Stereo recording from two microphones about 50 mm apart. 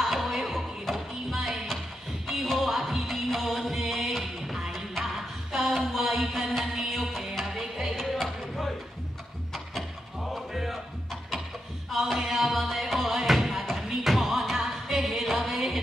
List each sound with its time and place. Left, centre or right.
0.0 s music: centre